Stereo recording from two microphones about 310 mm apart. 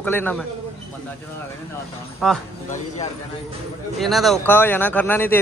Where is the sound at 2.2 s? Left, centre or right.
Centre.